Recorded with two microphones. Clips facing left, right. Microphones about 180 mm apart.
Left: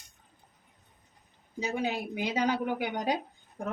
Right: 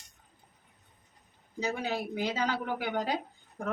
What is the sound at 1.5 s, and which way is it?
Speech, 15° left (ahead or behind).